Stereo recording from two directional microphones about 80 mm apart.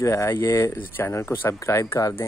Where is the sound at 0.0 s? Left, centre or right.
Left.